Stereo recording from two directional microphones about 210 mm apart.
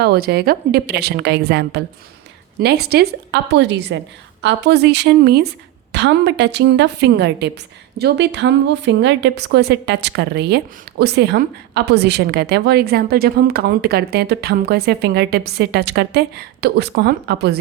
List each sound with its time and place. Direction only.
0.0 s a woman's voice: 50° right (ahead or behind)